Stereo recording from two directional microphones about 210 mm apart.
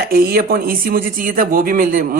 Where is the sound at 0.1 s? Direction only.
45° right (ahead or behind).